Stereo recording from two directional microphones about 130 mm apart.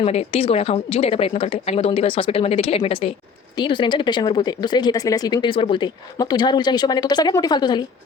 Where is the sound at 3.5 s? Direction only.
35° left (ahead or behind).